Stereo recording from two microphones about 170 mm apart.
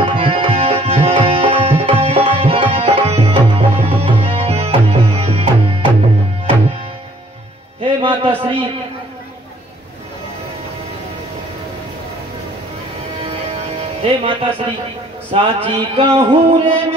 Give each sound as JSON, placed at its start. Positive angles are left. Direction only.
{"t": 0.0, "sound": "tabla", "side_deg": -35}
{"t": 3.5, "sound": "music", "side_deg": -35}
{"t": 7.8, "sound": "a sound", "side_deg": -30}
{"t": 13.5, "sound": "music", "side_deg": -35}
{"t": 15.3, "sound": "speech", "side_deg": -35}